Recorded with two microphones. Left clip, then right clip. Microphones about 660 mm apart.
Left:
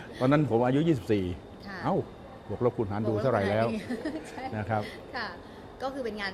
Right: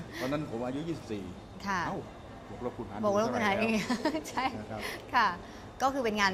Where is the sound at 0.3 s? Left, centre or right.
Left.